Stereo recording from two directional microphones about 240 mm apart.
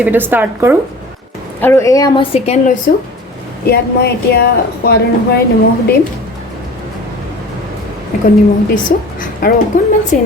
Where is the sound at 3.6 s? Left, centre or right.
Left.